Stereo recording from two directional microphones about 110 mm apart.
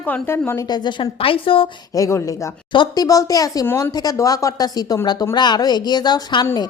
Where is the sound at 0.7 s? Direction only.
45° left (ahead or behind).